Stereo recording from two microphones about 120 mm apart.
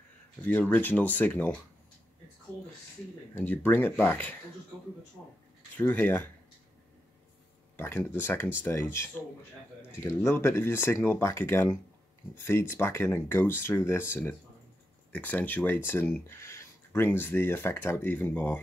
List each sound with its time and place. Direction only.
0.4 s speech: 15° left (ahead or behind)
3.3 s speech: 15° left (ahead or behind)
5.8 s speech: 15° left (ahead or behind)
7.7 s speech: 20° left (ahead or behind)